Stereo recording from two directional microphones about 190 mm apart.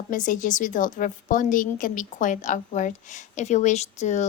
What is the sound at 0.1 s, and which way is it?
A woman's voice, 45° left (ahead or behind).